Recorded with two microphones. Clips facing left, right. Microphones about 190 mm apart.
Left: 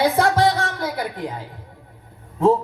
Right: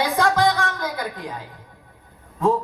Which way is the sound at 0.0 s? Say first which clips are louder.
Left 2 dB; 25° left (ahead or behind).